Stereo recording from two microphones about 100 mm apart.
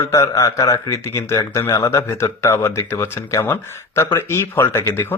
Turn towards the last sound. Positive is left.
turn(degrees=25)  # may be behind; listen again after turning